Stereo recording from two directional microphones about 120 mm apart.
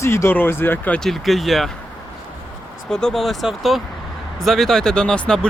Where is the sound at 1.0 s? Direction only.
Centre (ahead or behind).